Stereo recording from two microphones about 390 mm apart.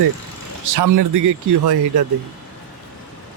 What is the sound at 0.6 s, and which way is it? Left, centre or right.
Speech, right.